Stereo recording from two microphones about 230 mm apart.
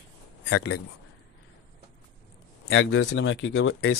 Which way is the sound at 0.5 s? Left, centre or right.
Left.